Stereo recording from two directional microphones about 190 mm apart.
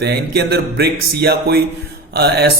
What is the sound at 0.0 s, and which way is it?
Music, 60° right (ahead or behind).